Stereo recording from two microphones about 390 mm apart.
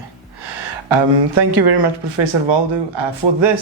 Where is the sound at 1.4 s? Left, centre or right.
Right.